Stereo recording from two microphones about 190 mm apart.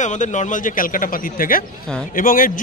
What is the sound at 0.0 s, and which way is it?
Speech, 40° left (ahead or behind).